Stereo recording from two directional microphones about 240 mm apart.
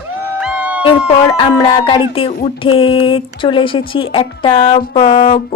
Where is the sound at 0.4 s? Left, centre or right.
Centre.